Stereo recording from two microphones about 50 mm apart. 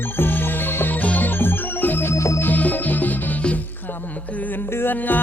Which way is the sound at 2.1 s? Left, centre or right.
Left.